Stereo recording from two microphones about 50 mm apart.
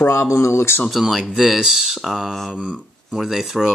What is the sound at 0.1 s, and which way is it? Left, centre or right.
Speech, left.